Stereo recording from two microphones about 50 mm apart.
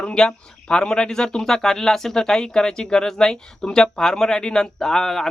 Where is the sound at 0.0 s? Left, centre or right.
Centre.